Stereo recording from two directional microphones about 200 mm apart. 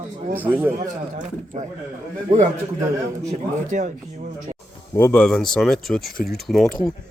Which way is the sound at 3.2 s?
40° right (ahead or behind).